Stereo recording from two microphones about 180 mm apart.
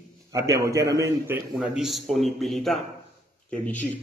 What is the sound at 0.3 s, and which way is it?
A man's voice, 15° right (ahead or behind).